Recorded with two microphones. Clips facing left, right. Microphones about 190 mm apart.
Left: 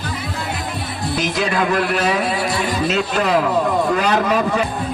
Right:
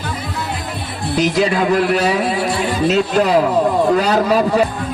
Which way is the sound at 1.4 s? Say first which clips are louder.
Right 3 dB; 35° right (ahead or behind).